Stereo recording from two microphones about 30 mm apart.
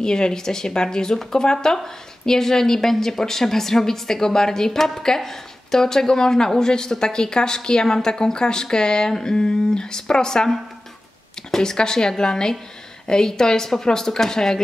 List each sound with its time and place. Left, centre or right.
0.0 s a woman's voice: left
11.5 s a woman's voice: left